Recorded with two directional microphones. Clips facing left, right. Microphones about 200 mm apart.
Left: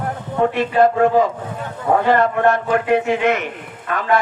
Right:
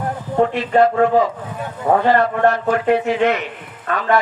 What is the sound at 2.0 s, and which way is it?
Speech, 50° left (ahead or behind).